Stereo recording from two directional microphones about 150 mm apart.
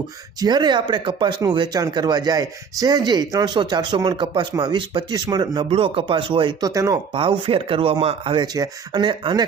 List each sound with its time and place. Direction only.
0.3 s speech: 30° right (ahead or behind)
7.1 s speech: 35° right (ahead or behind)
8.5 s speech: 25° right (ahead or behind)